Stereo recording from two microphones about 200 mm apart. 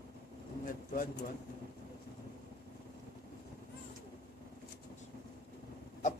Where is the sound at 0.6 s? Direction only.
40° left (ahead or behind).